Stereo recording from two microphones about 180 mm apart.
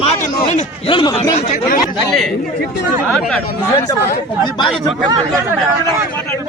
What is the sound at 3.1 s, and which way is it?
Speech, 5° left (ahead or behind).